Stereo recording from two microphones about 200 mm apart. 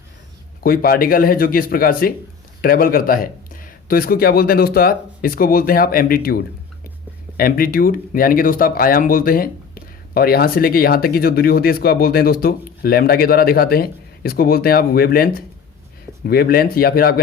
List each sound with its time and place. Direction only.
0.6 s speech: 45° left (ahead or behind)